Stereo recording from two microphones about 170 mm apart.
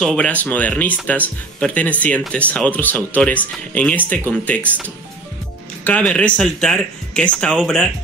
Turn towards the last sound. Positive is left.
turn(degrees=5)  # may be behind; listen again after turning